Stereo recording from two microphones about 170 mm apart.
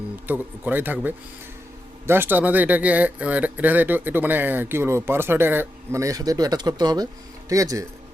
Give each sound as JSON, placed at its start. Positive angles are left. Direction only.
{"t": 0.3, "sound": "speech", "side_deg": -10}